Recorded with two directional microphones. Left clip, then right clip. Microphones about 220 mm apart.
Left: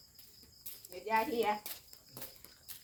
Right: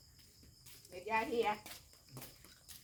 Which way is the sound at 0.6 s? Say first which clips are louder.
Left 3 dB; 45° left (ahead or behind).